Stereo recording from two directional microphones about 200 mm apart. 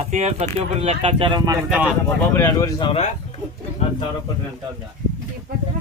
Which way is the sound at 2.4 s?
15° left (ahead or behind).